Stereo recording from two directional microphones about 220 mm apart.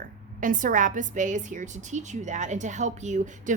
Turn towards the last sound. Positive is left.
turn(degrees=-35)  # may be behind; listen again after turning